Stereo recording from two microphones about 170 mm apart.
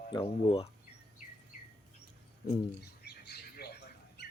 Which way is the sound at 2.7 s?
70° left (ahead or behind).